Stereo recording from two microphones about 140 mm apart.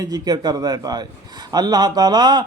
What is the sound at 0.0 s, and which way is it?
A man's voice, 30° right (ahead or behind).